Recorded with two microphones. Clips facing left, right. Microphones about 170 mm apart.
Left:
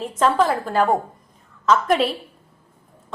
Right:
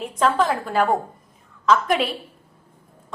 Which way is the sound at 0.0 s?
Centre (ahead or behind).